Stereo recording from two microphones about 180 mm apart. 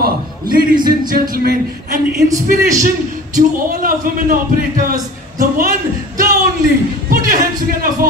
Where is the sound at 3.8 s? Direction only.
50° right (ahead or behind).